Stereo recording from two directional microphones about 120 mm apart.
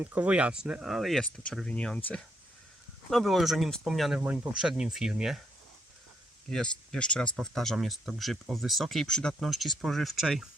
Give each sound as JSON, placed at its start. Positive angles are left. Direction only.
{"t": 0.0, "sound": "speech", "side_deg": -15}
{"t": 4.2, "sound": "speech", "side_deg": -20}
{"t": 4.5, "sound": "speech", "side_deg": -5}
{"t": 6.5, "sound": "speech", "side_deg": 5}